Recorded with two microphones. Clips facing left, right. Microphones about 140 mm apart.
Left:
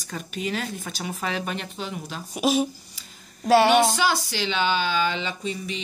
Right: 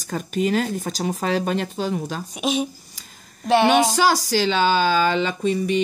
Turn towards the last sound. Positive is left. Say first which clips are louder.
# right 9 dB
turn(degrees=-50)  # may be behind; listen again after turning